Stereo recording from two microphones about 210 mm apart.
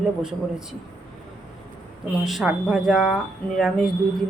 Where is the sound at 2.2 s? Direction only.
Centre (ahead or behind).